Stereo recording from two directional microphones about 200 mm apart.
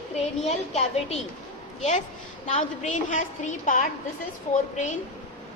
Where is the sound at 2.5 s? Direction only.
35° left (ahead or behind).